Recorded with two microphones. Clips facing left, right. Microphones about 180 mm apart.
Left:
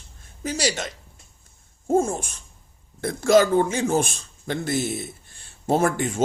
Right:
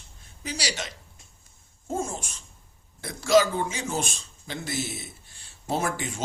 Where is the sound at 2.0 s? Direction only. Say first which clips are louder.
Left 9 dB; 50° left (ahead or behind).